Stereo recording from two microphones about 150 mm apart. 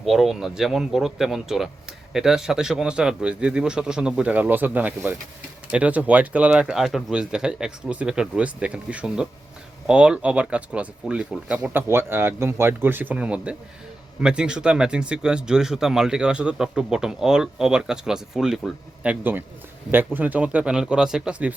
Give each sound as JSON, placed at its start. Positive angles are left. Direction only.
{"t": 0.0, "sound": "speech", "side_deg": 0}
{"t": 20.1, "sound": "speech", "side_deg": -10}